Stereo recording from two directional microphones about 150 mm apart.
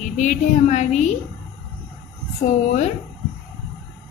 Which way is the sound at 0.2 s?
55° left (ahead or behind).